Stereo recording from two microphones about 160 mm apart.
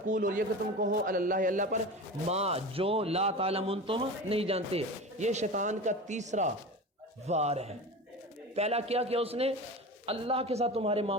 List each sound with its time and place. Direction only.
0.1 s a man's voice: 55° right (ahead or behind)
2.2 s speech: 40° right (ahead or behind)